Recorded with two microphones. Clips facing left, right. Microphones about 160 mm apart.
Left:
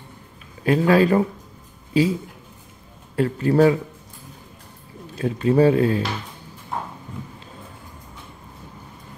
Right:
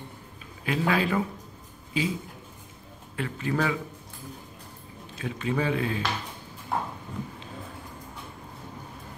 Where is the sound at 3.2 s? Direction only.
40° left (ahead or behind).